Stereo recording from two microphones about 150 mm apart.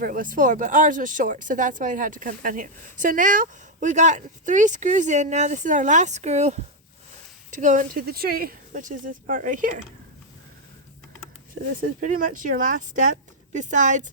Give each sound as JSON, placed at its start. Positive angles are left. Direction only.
{"t": 0.0, "sound": "speech", "side_deg": -65}
{"t": 11.9, "sound": "speech", "side_deg": -65}